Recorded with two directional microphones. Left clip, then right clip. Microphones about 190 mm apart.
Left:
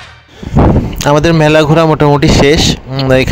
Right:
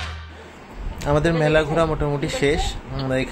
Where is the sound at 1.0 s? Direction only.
50° left (ahead or behind).